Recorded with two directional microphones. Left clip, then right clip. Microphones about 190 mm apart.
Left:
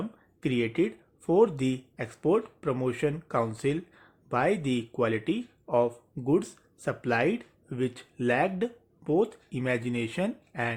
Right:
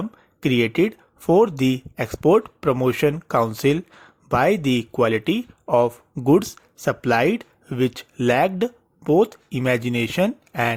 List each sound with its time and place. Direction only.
0.4 s speech: 40° right (ahead or behind)